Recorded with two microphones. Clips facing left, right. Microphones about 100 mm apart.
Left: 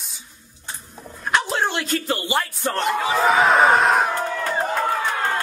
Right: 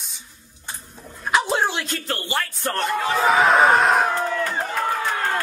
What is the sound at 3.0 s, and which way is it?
A man's voice, centre (ahead or behind).